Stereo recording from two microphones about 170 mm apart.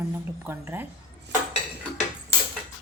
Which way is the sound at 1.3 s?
90° right.